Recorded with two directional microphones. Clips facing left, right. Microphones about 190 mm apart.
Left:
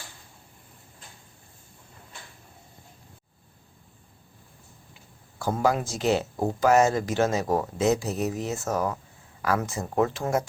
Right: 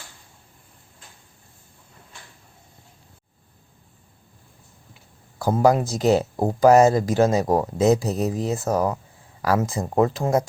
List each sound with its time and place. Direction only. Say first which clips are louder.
5.6 s speech: right 6 dB; 40° right (ahead or behind)